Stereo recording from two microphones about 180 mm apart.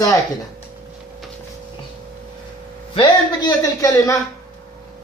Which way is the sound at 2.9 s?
25° left (ahead or behind).